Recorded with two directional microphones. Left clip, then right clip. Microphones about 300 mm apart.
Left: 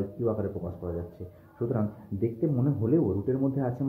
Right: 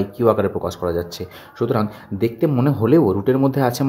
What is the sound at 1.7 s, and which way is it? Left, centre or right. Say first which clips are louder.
Speech: right 11 dB; right.